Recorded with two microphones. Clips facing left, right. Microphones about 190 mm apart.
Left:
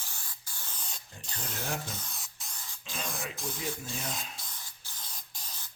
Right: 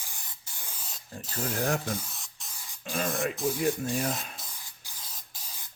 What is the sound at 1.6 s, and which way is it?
Rub, 65° right (ahead or behind).